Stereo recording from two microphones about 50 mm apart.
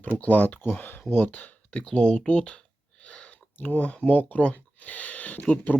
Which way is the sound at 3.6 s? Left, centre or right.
Left.